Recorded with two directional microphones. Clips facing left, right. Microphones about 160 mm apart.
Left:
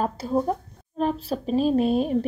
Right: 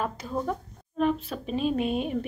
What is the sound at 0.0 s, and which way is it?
A woman's voice, 35° left (ahead or behind).